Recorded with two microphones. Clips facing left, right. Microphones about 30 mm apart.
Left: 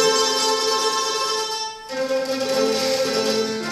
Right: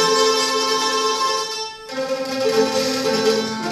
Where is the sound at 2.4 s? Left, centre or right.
Right.